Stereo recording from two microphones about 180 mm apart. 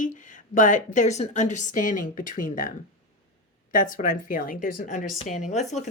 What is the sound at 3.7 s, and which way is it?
Speech, 50° left (ahead or behind).